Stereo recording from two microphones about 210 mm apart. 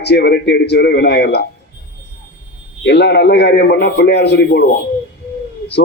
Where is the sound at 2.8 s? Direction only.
50° left (ahead or behind).